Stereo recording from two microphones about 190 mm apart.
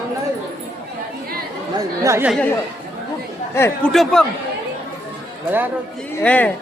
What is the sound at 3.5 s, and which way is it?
Speech, 15° left (ahead or behind).